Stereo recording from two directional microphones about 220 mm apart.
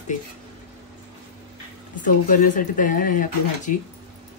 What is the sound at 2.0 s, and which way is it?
Speech, 35° left (ahead or behind).